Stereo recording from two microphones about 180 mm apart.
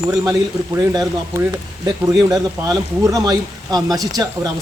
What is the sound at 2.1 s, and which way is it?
Speech, 20° right (ahead or behind).